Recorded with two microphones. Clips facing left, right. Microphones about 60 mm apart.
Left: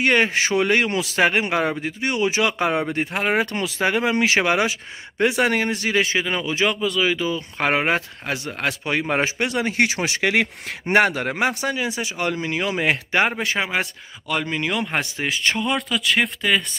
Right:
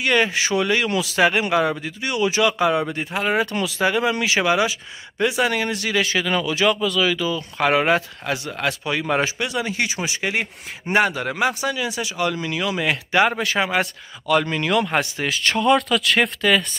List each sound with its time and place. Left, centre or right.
0.0 s speech: left
9.5 s speech: left
13.6 s speech: centre